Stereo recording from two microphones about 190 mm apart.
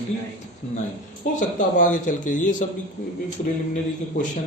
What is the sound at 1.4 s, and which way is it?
Speech, 40° left (ahead or behind).